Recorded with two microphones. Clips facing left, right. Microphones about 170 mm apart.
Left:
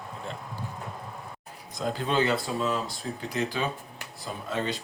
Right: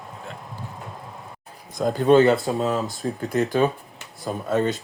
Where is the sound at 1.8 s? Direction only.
45° right (ahead or behind).